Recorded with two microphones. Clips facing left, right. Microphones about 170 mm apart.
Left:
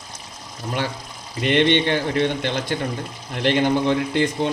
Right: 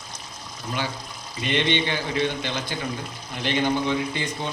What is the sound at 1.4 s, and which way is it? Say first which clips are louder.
Speech: left 6 dB; 60° left (ahead or behind).